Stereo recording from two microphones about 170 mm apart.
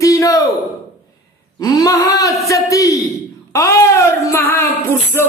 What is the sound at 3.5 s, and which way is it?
Music, 15° left (ahead or behind).